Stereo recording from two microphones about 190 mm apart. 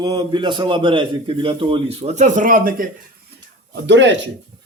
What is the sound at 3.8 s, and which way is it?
Speech, 70° right (ahead or behind).